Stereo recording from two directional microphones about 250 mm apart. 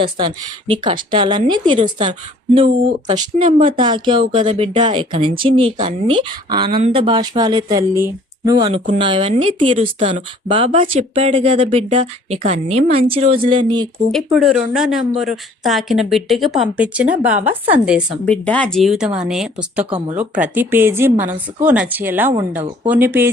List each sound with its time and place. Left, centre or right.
0.0 s speech: centre
14.1 s a woman's voice: centre